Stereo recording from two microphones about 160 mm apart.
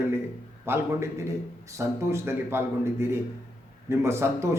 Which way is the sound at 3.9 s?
15° right (ahead or behind).